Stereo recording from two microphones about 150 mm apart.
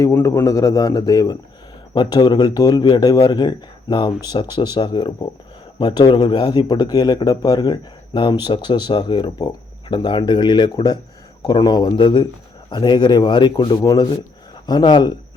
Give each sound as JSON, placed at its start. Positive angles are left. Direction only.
{"t": 0.0, "sound": "speech", "side_deg": 20}